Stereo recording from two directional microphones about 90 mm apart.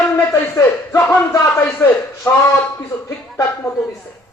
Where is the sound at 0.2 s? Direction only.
30° left (ahead or behind).